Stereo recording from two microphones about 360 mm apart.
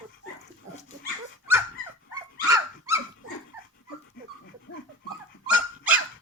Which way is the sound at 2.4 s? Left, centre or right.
Centre.